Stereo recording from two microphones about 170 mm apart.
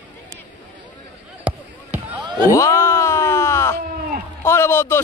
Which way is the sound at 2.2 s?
25° right (ahead or behind).